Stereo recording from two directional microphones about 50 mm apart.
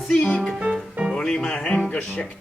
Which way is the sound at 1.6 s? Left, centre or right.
Left.